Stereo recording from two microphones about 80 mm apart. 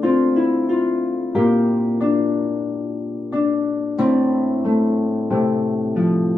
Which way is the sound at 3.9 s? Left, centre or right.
Centre.